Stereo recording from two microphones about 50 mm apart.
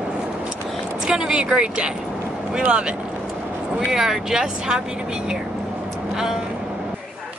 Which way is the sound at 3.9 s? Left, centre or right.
Centre.